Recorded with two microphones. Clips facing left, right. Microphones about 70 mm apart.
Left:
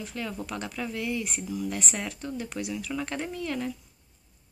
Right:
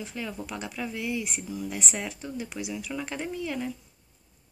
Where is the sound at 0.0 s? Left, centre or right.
Centre.